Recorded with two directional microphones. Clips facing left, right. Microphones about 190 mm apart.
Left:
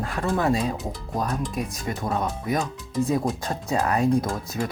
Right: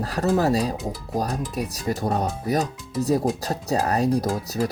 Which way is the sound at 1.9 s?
40° right (ahead or behind).